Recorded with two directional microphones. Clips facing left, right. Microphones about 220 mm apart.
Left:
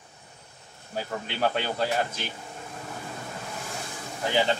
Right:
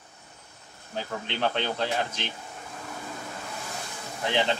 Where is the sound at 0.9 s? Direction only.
5° left (ahead or behind).